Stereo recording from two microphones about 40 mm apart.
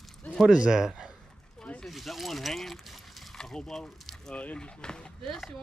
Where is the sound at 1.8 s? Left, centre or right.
Centre.